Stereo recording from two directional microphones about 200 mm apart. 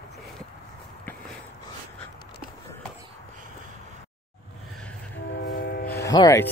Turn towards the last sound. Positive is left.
turn(degrees=15)  # may be behind; listen again after turning